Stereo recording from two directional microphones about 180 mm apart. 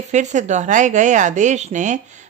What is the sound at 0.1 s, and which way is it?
A woman's voice, 40° right (ahead or behind).